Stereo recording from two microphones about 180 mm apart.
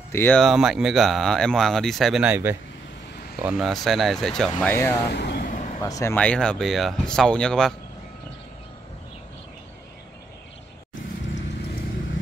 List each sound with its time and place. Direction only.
0.1 s speech: 10° left (ahead or behind)
0.4 s speech: centre (ahead or behind)
5.1 s vehicle: 65° left (ahead or behind)
5.5 s a sound: 45° left (ahead or behind)
5.8 s speech: 20° left (ahead or behind)
6.1 s speech: 5° left (ahead or behind)